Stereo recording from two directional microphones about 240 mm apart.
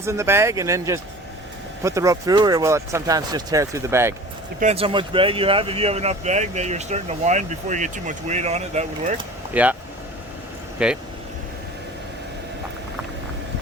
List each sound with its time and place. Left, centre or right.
0.0 s speech: centre
4.6 s speech: right
9.5 s speech: centre
10.8 s speech: centre